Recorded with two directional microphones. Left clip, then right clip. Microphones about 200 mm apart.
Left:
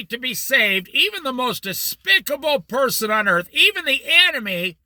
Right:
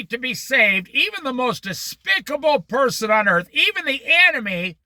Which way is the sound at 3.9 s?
15° left (ahead or behind).